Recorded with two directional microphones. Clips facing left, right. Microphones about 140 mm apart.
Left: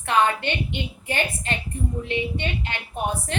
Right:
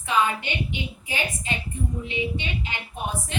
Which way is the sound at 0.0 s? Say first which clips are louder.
Left 3 dB; 60° left (ahead or behind).